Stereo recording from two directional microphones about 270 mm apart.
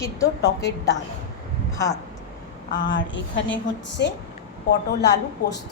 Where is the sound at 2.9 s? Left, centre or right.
Left.